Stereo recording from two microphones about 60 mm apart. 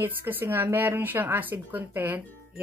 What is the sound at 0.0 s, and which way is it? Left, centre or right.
Speech, right.